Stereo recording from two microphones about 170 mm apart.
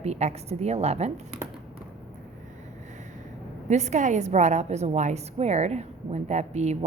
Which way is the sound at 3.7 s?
45° right (ahead or behind).